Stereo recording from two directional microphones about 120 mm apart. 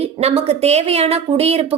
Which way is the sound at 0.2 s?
60° right (ahead or behind).